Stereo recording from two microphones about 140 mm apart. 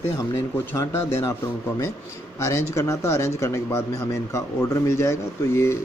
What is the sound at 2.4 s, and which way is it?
A man's voice, 20° left (ahead or behind).